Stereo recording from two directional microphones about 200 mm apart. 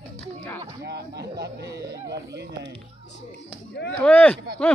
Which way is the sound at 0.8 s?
55° right (ahead or behind).